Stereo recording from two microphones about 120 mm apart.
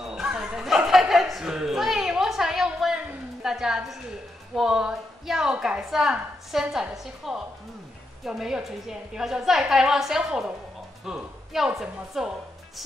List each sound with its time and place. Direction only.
0.0 s chatter: 5° right (ahead or behind)
4.6 s a woman's voice: 5° right (ahead or behind)